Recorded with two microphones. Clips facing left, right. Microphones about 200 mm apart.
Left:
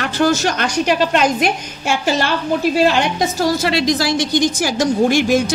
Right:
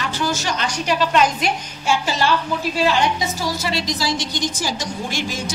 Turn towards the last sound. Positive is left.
turn(degrees=60)  # may be behind; listen again after turning